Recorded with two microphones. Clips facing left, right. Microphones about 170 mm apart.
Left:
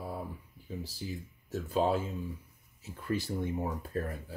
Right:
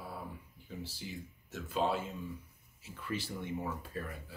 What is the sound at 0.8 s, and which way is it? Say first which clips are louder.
Speech: left 3 dB; 40° left (ahead or behind).